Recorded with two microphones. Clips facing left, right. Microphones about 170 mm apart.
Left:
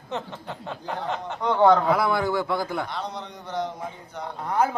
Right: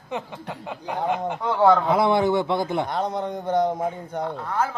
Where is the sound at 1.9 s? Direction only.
25° right (ahead or behind).